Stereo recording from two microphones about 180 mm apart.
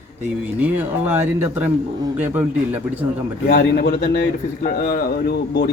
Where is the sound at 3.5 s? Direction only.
65° left (ahead or behind).